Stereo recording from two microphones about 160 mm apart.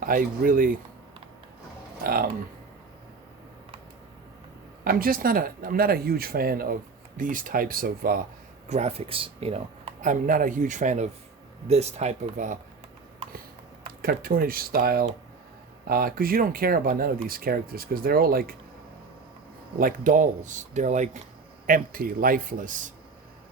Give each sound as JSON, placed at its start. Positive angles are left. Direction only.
{"t": 0.0, "sound": "a man's voice", "side_deg": -60}
{"t": 2.0, "sound": "speech", "side_deg": -65}
{"t": 4.8, "sound": "a man's voice", "side_deg": -65}
{"t": 8.7, "sound": "speech", "side_deg": -40}
{"t": 10.0, "sound": "speech", "side_deg": -55}
{"t": 14.0, "sound": "a man's voice", "side_deg": -65}
{"t": 19.8, "sound": "speech", "side_deg": -55}
{"t": 21.7, "sound": "a man's voice", "side_deg": -60}